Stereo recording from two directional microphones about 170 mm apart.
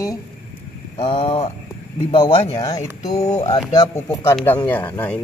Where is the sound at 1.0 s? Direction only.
35° left (ahead or behind).